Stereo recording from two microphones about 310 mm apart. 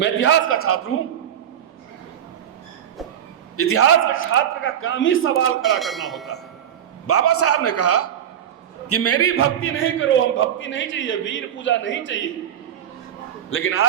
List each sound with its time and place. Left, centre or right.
0.0 s a man's voice: left
3.6 s a man's voice: left
5.8 s bell: centre
7.1 s a man's voice: left
13.5 s a man's voice: left